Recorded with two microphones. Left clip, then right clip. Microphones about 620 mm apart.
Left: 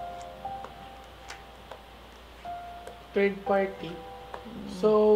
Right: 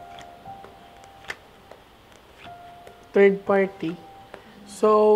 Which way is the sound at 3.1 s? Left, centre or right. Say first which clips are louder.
Right 8 dB; right.